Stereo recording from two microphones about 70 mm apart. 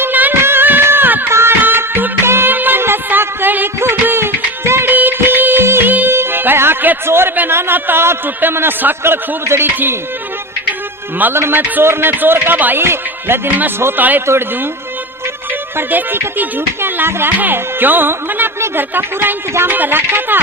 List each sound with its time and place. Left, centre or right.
0.0 s music: right
11.2 s a man's voice: right
15.9 s speech: right